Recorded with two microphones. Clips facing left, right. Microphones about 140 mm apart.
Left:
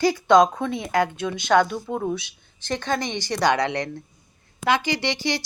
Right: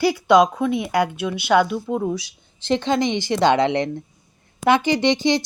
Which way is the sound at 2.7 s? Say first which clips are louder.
Right 6 dB; 20° right (ahead or behind).